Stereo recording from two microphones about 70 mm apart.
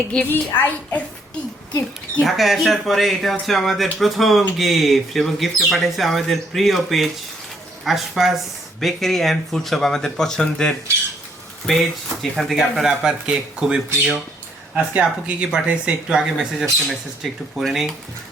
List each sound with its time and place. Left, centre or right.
0.1 s a woman's voice: left
2.2 s speech: centre